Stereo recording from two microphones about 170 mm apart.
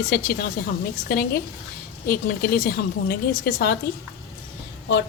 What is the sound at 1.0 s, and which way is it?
A woman's voice, 70° left (ahead or behind).